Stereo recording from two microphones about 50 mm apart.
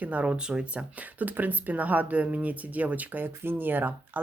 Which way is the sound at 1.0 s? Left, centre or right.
Right.